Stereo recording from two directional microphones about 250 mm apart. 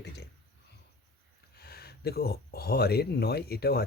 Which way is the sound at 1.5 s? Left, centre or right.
Left.